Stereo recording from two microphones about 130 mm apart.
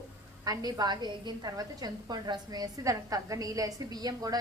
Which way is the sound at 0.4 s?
30° right (ahead or behind).